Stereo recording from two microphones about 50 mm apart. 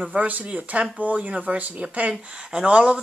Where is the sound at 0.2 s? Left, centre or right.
Right.